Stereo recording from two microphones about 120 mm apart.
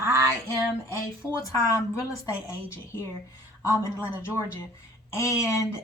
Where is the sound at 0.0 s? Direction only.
25° right (ahead or behind).